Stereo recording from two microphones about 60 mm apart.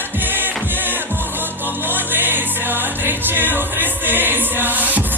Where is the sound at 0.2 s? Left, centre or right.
Right.